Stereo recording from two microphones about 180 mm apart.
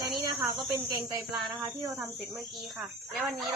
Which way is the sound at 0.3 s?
20° right (ahead or behind).